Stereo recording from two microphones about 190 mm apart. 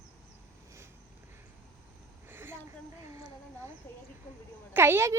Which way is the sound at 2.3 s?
10° right (ahead or behind).